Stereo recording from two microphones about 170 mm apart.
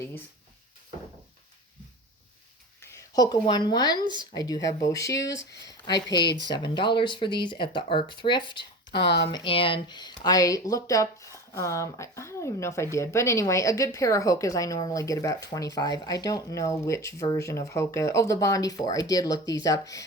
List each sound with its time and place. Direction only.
2.8 s a woman's voice: 20° left (ahead or behind)
8.9 s speech: 85° left
9.3 s speech: 30° left (ahead or behind)